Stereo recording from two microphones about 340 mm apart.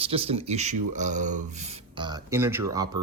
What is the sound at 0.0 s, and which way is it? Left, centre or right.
Speech, centre.